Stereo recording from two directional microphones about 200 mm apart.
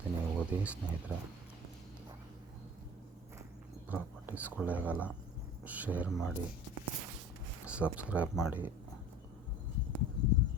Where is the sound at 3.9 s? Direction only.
10° right (ahead or behind).